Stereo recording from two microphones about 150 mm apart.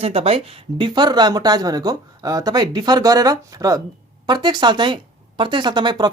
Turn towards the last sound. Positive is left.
turn(degrees=-30)  # may be behind; listen again after turning